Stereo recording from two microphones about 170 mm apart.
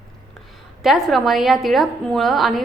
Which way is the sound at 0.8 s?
Centre (ahead or behind).